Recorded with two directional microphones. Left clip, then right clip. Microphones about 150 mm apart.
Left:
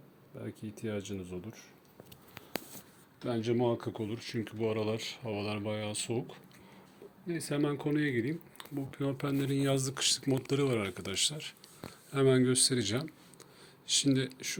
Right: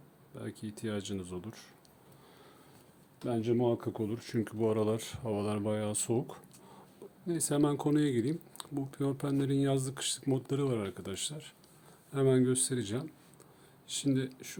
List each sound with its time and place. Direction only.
0.3 s speech: 15° right (ahead or behind)
3.2 s speech: 30° right (ahead or behind); by 6.4 s 45° right (ahead or behind)
7.3 s speech: 30° right (ahead or behind); by 14.3 s 5° right (ahead or behind)